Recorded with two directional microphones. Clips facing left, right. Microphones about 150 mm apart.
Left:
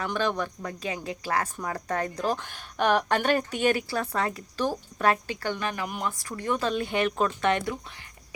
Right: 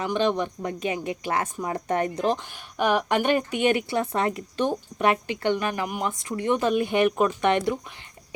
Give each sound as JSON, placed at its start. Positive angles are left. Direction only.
{"t": 0.0, "sound": "a woman's voice", "side_deg": -20}
{"t": 2.4, "sound": "a woman's voice", "side_deg": -10}